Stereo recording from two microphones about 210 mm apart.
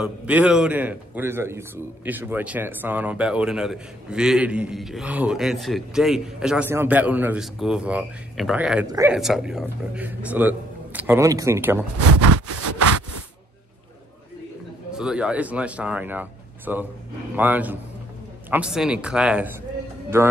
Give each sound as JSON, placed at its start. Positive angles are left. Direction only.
{"t": 0.0, "sound": "a man's voice", "side_deg": -5}
{"t": 8.8, "sound": "speech", "side_deg": -15}
{"t": 9.1, "sound": "speech", "side_deg": 0}
{"t": 14.9, "sound": "a man's voice", "side_deg": -5}